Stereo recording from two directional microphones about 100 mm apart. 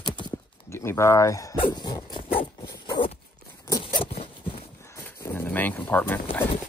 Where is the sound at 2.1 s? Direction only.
60° left (ahead or behind).